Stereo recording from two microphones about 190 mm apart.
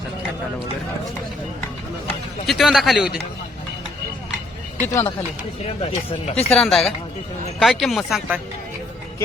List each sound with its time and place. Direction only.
2.5 s speech: centre (ahead or behind)
4.8 s speech: 15° left (ahead or behind)
5.6 s speech: 30° left (ahead or behind)
6.3 s speech: 5° left (ahead or behind)